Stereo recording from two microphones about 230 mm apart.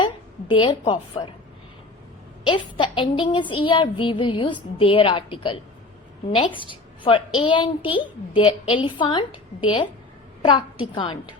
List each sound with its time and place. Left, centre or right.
0.0 s a woman's voice: left
2.5 s a woman's voice: left